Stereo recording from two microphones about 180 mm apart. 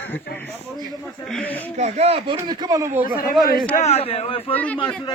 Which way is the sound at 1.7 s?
40° right (ahead or behind).